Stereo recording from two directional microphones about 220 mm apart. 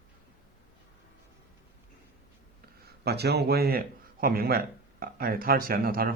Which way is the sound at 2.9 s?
45° right (ahead or behind).